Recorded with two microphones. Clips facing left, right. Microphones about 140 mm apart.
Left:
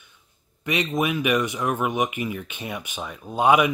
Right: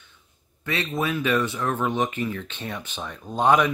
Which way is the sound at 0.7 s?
15° left (ahead or behind).